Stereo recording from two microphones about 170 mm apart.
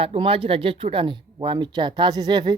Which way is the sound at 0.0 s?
30° right (ahead or behind).